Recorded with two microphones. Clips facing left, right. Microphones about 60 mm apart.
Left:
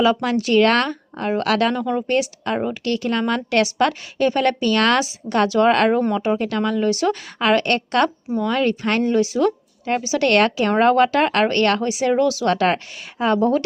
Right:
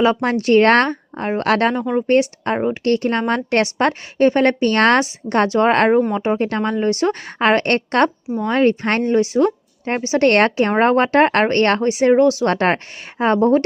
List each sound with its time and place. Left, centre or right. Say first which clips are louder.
0.0 s a woman's voice: right 2 dB; right
1.7 s speech: right 2 dB; right
2.0 s a woman's voice: right 5 dB; right